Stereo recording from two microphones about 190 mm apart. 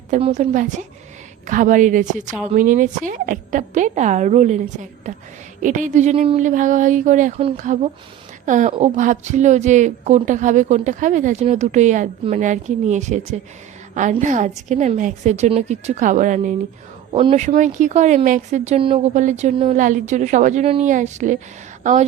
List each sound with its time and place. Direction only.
0.1 s a woman's voice: 40° right (ahead or behind)
17.1 s speech: 25° right (ahead or behind)